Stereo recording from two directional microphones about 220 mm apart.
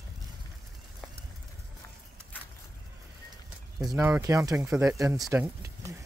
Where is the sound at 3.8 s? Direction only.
15° right (ahead or behind).